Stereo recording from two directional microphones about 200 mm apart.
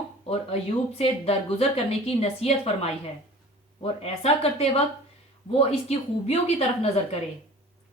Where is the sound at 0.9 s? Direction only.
30° left (ahead or behind).